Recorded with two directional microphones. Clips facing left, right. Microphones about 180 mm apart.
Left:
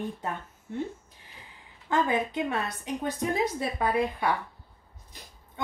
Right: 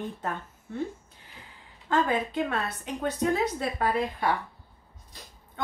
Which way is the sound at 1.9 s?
15° left (ahead or behind).